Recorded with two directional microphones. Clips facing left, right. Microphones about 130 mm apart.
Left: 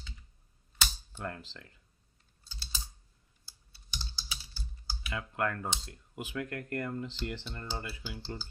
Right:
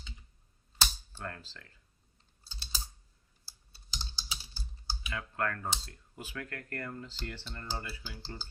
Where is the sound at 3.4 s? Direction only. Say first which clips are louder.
Right 2 dB; 30° right (ahead or behind).